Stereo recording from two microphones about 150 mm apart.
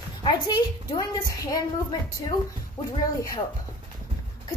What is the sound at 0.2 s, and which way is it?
A woman's voice, 30° left (ahead or behind).